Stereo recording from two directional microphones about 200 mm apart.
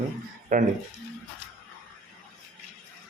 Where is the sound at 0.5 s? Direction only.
40° right (ahead or behind).